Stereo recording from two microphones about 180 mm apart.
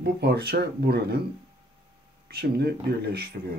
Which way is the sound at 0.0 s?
60° right (ahead or behind).